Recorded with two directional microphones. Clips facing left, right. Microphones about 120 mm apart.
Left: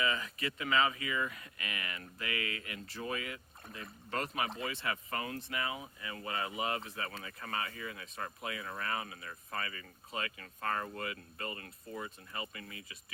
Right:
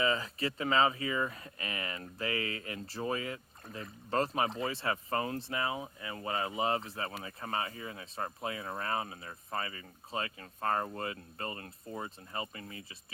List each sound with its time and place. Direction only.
0.0 s speech: 30° right (ahead or behind)